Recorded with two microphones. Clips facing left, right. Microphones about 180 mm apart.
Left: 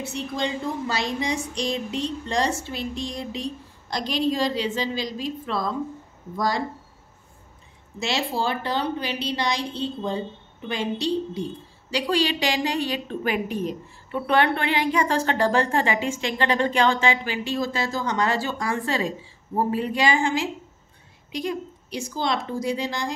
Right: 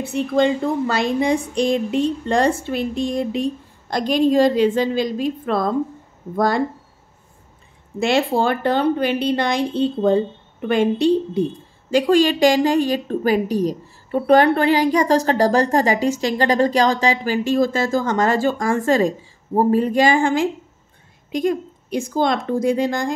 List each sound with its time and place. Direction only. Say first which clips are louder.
0.0 s a woman's voice: right 10 dB; 55° right (ahead or behind)
8.0 s a woman's voice: right 8 dB; 55° right (ahead or behind)